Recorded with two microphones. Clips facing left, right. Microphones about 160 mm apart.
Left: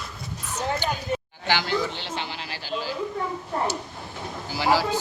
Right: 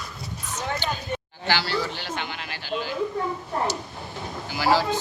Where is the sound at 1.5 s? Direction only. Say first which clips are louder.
Left 1 dB; 15° left (ahead or behind); by 2.9 s 35° left (ahead or behind).